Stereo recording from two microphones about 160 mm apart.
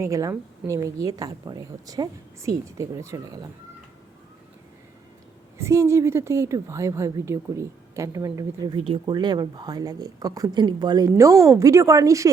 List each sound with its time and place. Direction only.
0.0 s a woman's voice: 20° right (ahead or behind)
5.5 s a woman's voice: 15° right (ahead or behind)